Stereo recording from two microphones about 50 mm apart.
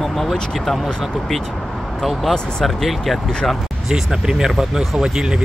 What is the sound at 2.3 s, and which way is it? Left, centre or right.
Speech, centre.